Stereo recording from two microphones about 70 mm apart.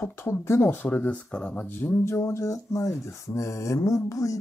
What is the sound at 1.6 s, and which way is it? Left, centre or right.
Speech, left.